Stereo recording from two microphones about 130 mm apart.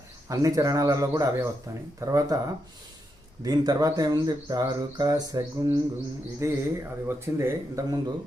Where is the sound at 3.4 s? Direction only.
30° right (ahead or behind).